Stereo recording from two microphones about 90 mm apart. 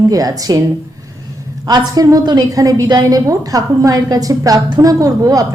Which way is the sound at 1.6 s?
45° right (ahead or behind).